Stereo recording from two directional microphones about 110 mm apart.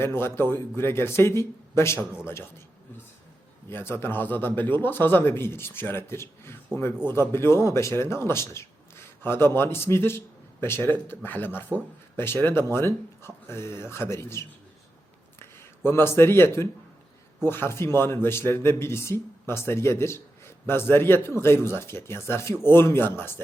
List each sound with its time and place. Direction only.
0.0 s speech: 20° left (ahead or behind)
3.7 s speech: 20° left (ahead or behind)